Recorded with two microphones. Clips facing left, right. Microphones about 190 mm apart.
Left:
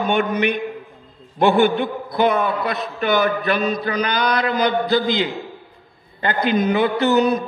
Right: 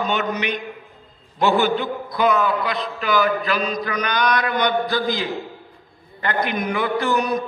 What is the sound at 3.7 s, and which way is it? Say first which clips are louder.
A man's voice: left 2 dB; 30° left (ahead or behind).